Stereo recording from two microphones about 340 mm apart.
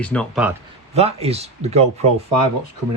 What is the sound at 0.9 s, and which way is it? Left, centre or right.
Speech, centre.